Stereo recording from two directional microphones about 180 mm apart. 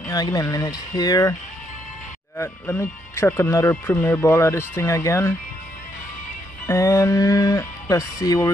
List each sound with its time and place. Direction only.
0.1 s speech: 20° left (ahead or behind)
2.3 s speech: 10° left (ahead or behind)
6.7 s speech: 15° left (ahead or behind)